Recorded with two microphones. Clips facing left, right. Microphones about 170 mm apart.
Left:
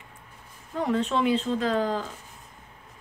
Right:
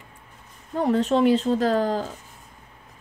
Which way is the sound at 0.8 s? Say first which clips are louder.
Right 5 dB; 35° right (ahead or behind).